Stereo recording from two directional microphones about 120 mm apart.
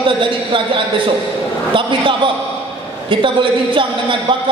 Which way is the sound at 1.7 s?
45° right (ahead or behind).